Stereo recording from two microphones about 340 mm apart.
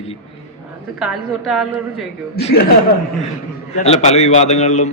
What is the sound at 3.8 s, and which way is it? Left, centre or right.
A man's voice, centre.